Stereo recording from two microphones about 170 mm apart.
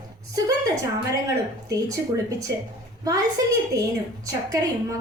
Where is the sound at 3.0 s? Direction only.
20° right (ahead or behind).